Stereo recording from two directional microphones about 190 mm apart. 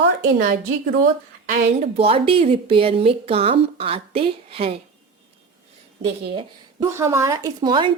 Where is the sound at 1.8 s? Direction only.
30° right (ahead or behind).